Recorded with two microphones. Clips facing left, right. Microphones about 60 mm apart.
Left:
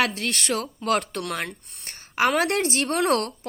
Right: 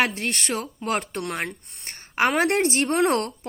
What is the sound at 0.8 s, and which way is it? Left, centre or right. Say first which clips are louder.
Speech: left 3 dB; right.